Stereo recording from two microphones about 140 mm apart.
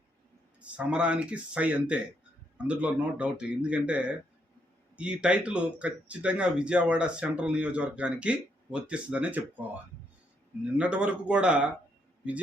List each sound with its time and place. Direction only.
0.6 s speech: 10° right (ahead or behind)